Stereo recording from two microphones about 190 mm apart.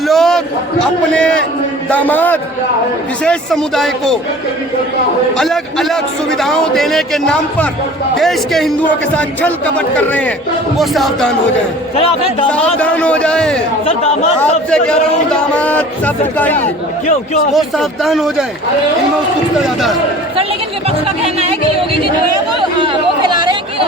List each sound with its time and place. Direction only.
0.1 s a sound: centre (ahead or behind)
1.9 s a man's voice: 10° left (ahead or behind)
5.4 s a man's voice: centre (ahead or behind)
12.5 s speech: 5° left (ahead or behind)
13.8 s speech: 30° left (ahead or behind)
15.3 s speech: 5° left (ahead or behind)
17.1 s speech: 40° left (ahead or behind)
17.5 s a man's voice: centre (ahead or behind)
19.5 s a man's voice: centre (ahead or behind)
21.2 s speech: 35° right (ahead or behind)
22.8 s chatter: 25° right (ahead or behind)